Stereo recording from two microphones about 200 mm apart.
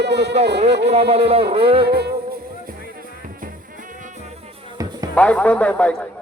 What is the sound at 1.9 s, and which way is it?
Music, 55° right (ahead or behind).